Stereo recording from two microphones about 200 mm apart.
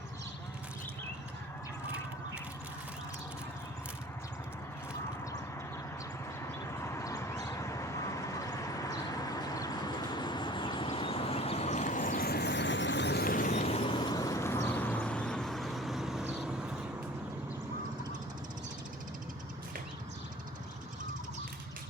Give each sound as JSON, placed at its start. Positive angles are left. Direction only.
{"t": 6.7, "sound": "vehicle", "side_deg": 15}